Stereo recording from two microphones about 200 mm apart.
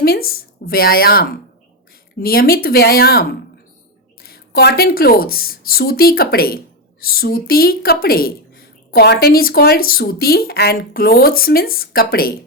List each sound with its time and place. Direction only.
0.0 s a woman's voice: 50° left (ahead or behind)